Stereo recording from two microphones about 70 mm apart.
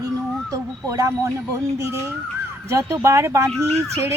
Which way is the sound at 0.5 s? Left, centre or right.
Right.